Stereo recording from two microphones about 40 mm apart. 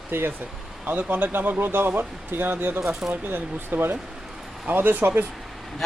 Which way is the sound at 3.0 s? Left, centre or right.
Right.